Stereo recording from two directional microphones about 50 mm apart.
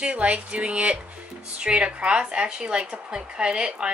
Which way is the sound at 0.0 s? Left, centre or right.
Right.